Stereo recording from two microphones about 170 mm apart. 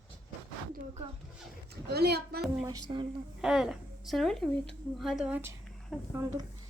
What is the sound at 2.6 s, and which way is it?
Speech, 25° right (ahead or behind).